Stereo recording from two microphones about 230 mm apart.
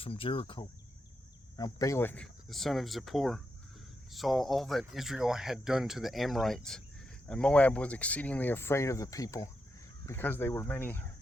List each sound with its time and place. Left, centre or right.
0.0 s speech: left